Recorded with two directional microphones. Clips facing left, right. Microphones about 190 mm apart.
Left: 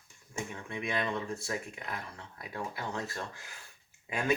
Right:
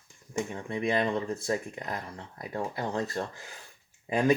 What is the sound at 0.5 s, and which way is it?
Speech, 35° right (ahead or behind).